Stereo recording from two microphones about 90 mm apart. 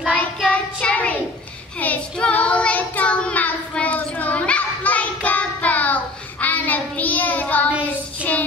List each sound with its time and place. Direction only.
0.1 s child singing: 15° left (ahead or behind)